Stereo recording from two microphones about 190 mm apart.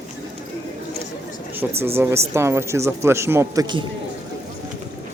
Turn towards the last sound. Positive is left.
turn(degrees=-20)  # may be behind; listen again after turning